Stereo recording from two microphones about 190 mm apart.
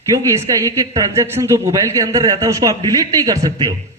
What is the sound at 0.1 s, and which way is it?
A man's voice, 15° right (ahead or behind).